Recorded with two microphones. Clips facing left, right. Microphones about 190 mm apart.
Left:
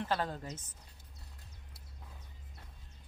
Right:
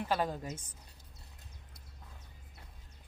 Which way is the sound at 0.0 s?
10° right (ahead or behind).